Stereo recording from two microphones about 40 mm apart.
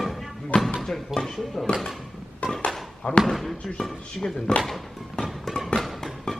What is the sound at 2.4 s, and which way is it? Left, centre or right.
Speech, left.